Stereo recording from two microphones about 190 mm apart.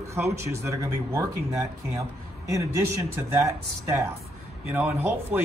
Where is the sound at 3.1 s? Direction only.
10° right (ahead or behind).